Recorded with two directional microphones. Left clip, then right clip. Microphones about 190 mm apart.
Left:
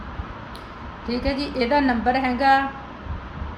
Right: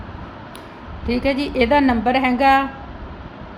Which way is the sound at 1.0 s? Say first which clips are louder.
Right 5 dB; 25° right (ahead or behind).